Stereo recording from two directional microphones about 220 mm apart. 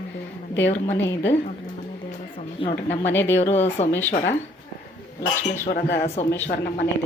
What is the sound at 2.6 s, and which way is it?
Speech, 25° left (ahead or behind).